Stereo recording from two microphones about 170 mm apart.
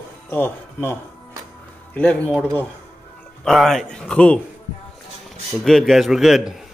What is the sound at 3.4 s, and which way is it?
Speech, centre (ahead or behind).